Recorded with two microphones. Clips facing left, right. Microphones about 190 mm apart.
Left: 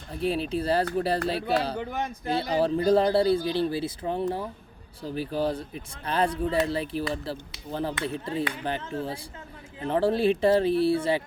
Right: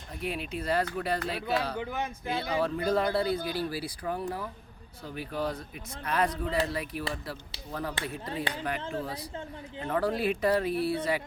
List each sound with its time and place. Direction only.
0.1 s a man's voice: 30° left (ahead or behind)